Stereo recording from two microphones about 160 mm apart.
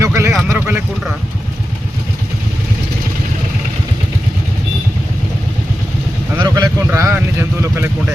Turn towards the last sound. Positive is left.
turn(degrees=-15)  # may be behind; listen again after turning